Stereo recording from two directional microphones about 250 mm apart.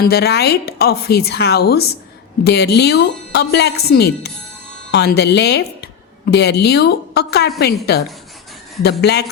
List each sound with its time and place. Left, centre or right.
0.0 s a woman's voice: left